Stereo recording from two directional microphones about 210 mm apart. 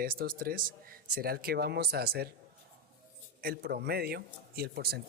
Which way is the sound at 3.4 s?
50° right (ahead or behind).